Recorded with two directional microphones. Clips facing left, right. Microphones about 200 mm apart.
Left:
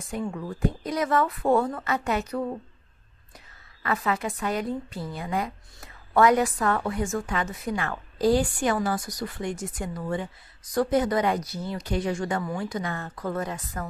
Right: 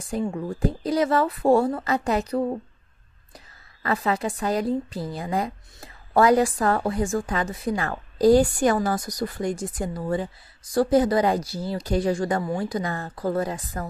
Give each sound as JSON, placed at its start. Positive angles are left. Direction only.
{"t": 0.1, "sound": "a woman's voice", "side_deg": -30}